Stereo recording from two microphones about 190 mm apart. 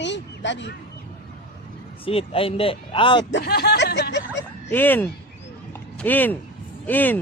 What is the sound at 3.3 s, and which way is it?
Snicker, 65° left (ahead or behind).